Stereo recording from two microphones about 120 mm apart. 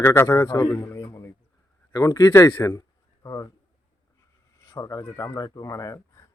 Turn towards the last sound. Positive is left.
turn(degrees=30)  # may be behind; listen again after turning